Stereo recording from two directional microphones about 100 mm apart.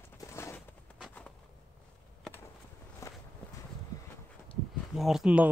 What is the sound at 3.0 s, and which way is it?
Walk, 35° left (ahead or behind).